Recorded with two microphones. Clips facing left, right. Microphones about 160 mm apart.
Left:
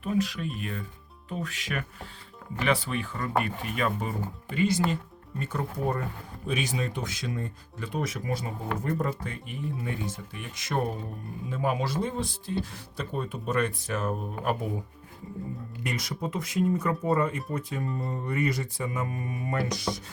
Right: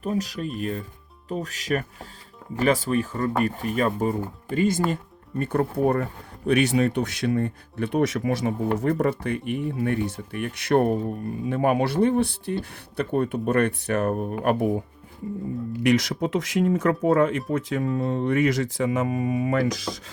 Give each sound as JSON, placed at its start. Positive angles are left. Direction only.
{"t": 0.0, "sound": "speech", "side_deg": -40}
{"t": 15.8, "sound": "speech", "side_deg": -90}